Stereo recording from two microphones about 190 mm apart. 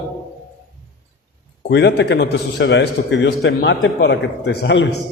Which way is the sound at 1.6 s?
65° left (ahead or behind).